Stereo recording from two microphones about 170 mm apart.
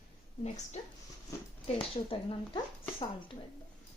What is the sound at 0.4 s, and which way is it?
Speech, 40° left (ahead or behind).